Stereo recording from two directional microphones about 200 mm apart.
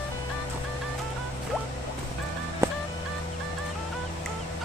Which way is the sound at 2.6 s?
15° right (ahead or behind).